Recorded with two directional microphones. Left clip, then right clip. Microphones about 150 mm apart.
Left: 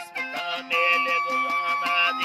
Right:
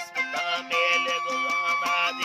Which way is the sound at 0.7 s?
Centre (ahead or behind).